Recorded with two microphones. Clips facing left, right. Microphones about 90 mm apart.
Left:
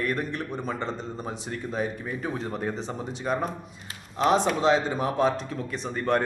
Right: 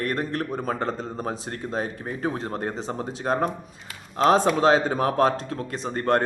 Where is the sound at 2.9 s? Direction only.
55° right (ahead or behind).